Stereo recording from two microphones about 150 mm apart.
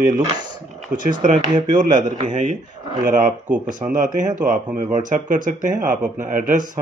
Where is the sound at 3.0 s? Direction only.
65° right (ahead or behind).